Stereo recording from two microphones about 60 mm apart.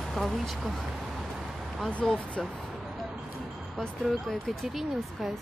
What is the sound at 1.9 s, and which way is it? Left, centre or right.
Speech, centre.